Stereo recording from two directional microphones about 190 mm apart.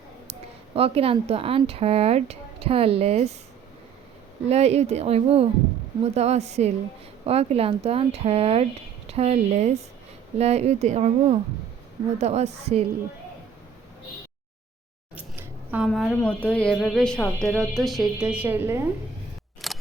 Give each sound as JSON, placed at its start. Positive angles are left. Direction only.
{"t": 0.8, "sound": "speech", "side_deg": -30}
{"t": 4.4, "sound": "speech", "side_deg": -35}
{"t": 15.1, "sound": "scissors", "side_deg": -10}
{"t": 15.9, "sound": "speech", "side_deg": 5}
{"t": 19.6, "sound": "a sound", "side_deg": 0}